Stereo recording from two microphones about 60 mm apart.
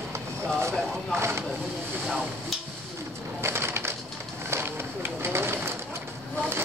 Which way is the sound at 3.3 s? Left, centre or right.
Right.